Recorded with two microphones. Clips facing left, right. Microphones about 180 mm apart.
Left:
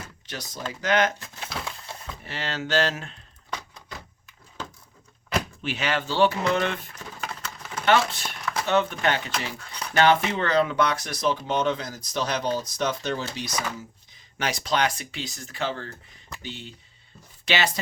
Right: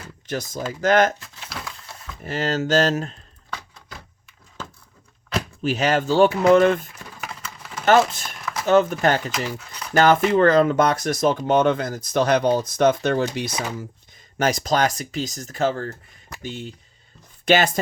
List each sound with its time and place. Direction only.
0.3 s speech: 50° right (ahead or behind)
2.2 s speech: 45° right (ahead or behind)
5.6 s speech: 40° right (ahead or behind)
7.2 s a sound: 5° right (ahead or behind)
7.9 s speech: 45° right (ahead or behind)
8.2 s a sound: centre (ahead or behind)
8.6 s speech: 40° right (ahead or behind)
14.3 s speech: 45° right (ahead or behind)